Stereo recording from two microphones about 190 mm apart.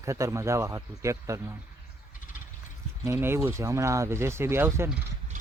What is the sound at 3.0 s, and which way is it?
Speech, 10° right (ahead or behind).